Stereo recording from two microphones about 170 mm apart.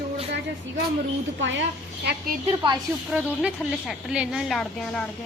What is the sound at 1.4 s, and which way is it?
Speech, 90° right.